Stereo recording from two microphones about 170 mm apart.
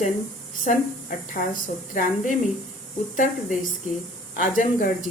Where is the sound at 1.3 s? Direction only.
50° left (ahead or behind).